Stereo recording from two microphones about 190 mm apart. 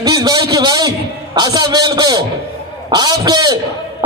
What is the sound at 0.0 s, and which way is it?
A man's voice, 20° right (ahead or behind).